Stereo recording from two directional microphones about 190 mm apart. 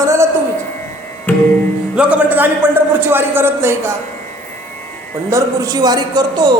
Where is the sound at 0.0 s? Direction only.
15° right (ahead or behind).